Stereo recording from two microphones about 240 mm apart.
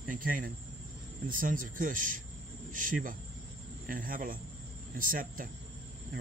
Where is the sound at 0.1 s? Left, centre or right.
Right.